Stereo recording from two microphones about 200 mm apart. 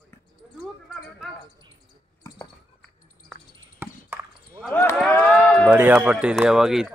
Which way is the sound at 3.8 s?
10° right (ahead or behind).